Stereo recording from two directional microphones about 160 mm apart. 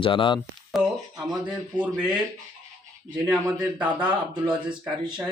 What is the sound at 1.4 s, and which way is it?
Speech, 5° right (ahead or behind).